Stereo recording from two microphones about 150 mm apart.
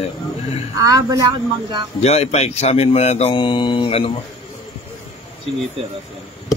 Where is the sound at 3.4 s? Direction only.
30° left (ahead or behind).